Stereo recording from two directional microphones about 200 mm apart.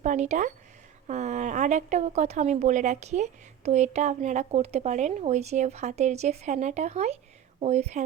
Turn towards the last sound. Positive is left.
turn(degrees=-35)  # may be behind; listen again after turning